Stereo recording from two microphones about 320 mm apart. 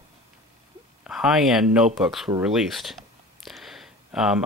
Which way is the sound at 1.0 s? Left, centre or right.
Centre.